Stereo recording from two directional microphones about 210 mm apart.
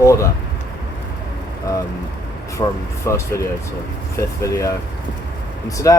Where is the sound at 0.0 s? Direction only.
15° left (ahead or behind).